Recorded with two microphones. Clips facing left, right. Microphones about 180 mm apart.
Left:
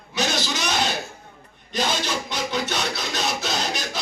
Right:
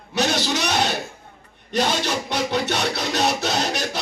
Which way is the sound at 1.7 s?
65° right (ahead or behind).